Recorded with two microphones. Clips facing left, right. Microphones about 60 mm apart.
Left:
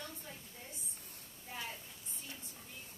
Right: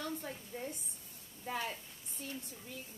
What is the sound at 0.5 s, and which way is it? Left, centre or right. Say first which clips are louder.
A woman's voice: right 9 dB; right.